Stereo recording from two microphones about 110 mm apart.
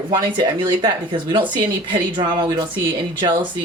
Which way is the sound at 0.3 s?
45° right (ahead or behind).